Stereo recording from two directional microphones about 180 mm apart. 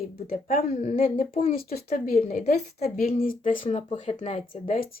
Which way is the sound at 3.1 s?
50° left (ahead or behind).